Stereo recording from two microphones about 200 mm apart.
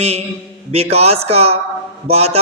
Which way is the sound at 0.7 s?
30° right (ahead or behind).